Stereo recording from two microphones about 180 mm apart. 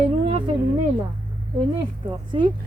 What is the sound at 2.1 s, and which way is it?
Speech, 25° right (ahead or behind).